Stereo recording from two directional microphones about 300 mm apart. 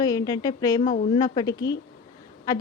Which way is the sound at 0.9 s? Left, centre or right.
Left.